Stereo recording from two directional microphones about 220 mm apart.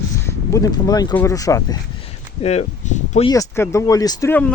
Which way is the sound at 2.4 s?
30° left (ahead or behind).